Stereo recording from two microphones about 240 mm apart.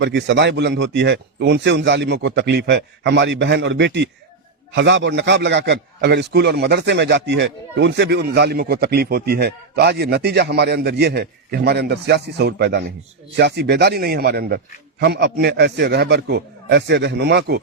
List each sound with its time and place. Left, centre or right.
0.0 s a man's voice: right